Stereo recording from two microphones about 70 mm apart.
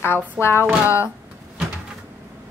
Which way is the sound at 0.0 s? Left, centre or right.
Left.